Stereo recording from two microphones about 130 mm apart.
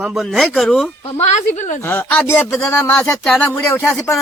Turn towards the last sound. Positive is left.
turn(degrees=15)  # may be behind; listen again after turning